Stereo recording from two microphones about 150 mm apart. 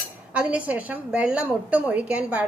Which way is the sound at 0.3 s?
10° right (ahead or behind).